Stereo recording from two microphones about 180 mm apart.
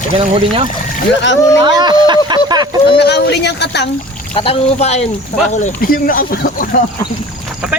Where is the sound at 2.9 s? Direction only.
65° left (ahead or behind).